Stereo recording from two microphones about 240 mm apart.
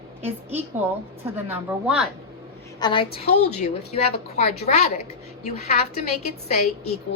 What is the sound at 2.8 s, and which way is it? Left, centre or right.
A woman's voice, left.